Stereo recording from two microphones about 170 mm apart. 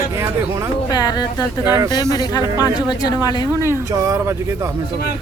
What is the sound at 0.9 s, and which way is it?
Speech, 25° left (ahead or behind).